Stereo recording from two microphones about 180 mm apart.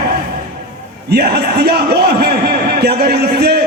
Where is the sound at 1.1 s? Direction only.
65° right (ahead or behind).